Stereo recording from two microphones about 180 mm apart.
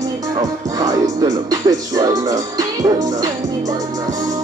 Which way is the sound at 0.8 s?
20° right (ahead or behind).